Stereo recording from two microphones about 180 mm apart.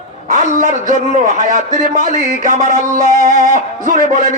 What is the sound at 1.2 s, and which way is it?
Music, 45° right (ahead or behind).